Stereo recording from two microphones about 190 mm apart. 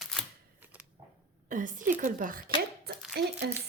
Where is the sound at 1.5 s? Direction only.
45° right (ahead or behind).